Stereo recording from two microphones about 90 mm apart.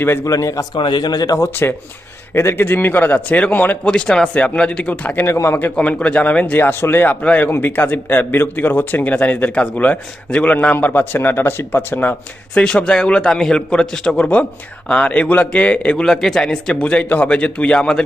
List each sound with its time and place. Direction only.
0.0 s speech: 25° left (ahead or behind)
0.3 s a man's voice: 35° left (ahead or behind)
0.8 s a man's voice: 60° left (ahead or behind); by 1.5 s 45° left (ahead or behind)
2.3 s a man's voice: 30° left (ahead or behind)
5.2 s speech: 30° left (ahead or behind)
12.5 s a man's voice: 10° left (ahead or behind)